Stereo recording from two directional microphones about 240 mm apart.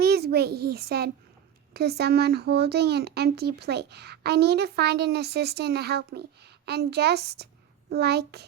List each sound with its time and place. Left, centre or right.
0.0 s a child's voice: right